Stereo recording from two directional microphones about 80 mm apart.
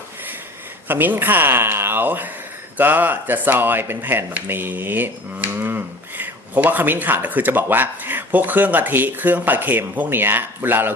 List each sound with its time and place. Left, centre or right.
0.9 s speech: right